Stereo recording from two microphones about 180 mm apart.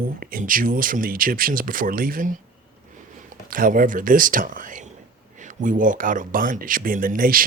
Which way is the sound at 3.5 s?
50° right (ahead or behind).